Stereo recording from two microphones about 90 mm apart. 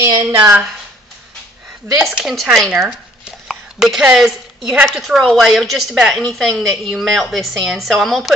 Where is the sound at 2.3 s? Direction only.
Centre (ahead or behind).